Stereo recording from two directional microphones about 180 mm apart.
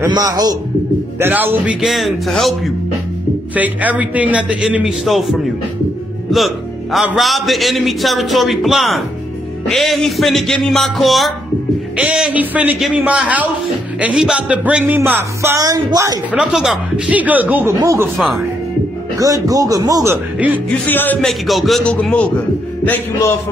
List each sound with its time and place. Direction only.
0.1 s a man's voice: 20° right (ahead or behind)
1.2 s a man's voice: 10° right (ahead or behind)
16.3 s a man's voice: 5° right (ahead or behind)
20.8 s a man's voice: 10° left (ahead or behind)